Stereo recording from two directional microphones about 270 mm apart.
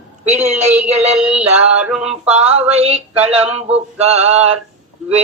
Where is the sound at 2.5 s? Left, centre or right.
Right.